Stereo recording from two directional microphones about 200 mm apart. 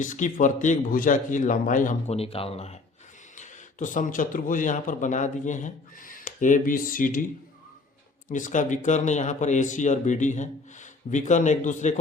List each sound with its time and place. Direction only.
0.0 s speech: 40° left (ahead or behind)
8.3 s speech: 40° left (ahead or behind)